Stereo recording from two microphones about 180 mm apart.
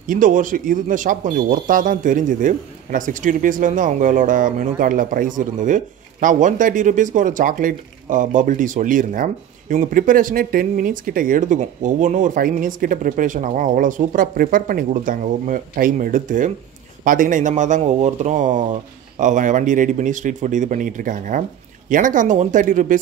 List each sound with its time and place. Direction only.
0.0 s speech: 50° right (ahead or behind)